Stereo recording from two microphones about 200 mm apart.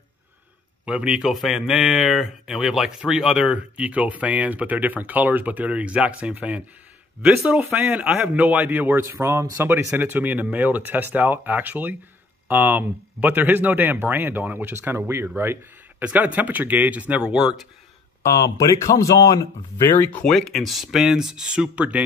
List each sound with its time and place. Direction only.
0.8 s speech: 5° right (ahead or behind)
18.2 s speech: 15° left (ahead or behind); by 22.0 s 5° right (ahead or behind)